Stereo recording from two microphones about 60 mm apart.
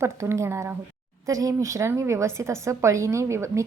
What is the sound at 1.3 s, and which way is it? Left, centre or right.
A woman's voice, right.